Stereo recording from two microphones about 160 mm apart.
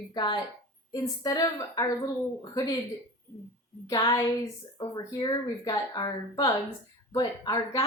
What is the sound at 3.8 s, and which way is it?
A woman's voice, 25° left (ahead or behind).